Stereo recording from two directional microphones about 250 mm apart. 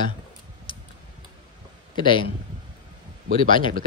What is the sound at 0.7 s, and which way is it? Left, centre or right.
Typing, centre.